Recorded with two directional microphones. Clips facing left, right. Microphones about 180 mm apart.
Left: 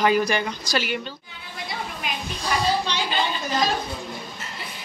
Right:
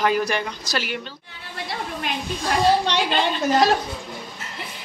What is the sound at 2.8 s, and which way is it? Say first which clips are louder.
Speech: right 4 dB; 75° right (ahead or behind).